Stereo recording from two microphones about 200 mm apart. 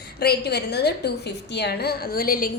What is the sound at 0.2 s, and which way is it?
A woman's voice, 55° left (ahead or behind).